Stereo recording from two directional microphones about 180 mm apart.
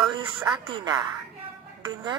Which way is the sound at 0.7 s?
25° right (ahead or behind).